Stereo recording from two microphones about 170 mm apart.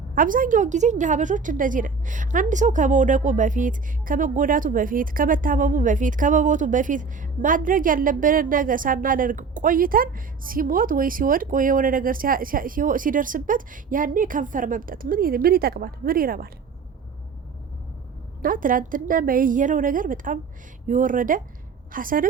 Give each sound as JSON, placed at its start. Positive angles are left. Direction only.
{"t": 0.1, "sound": "a woman's voice", "side_deg": -55}
{"t": 18.4, "sound": "a woman's voice", "side_deg": -55}